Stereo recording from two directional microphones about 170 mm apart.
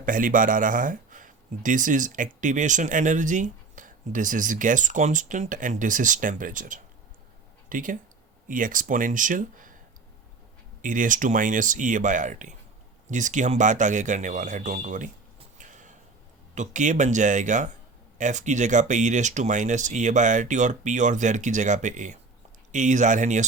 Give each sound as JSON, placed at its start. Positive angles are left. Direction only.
{"t": 0.0, "sound": "speech", "side_deg": -50}
{"t": 10.8, "sound": "speech", "side_deg": -50}
{"t": 15.5, "sound": "a sound", "side_deg": -50}
{"t": 16.6, "sound": "speech", "side_deg": -45}